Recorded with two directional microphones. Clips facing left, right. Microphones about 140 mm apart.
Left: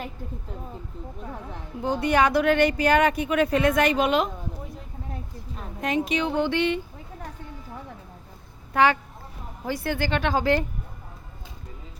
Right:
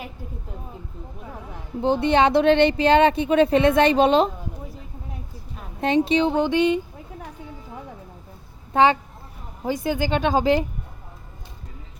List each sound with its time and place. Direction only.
1.8 s speech: 25° right (ahead or behind)
5.8 s a woman's voice: 30° right (ahead or behind)
8.7 s speech: 25° right (ahead or behind)